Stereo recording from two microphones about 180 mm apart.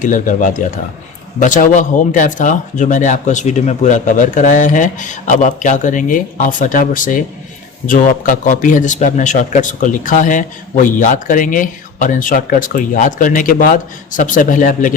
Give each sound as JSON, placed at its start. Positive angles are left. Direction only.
{"t": 0.0, "sound": "speech", "side_deg": 45}